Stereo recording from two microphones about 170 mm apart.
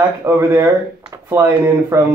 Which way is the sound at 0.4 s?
15° right (ahead or behind).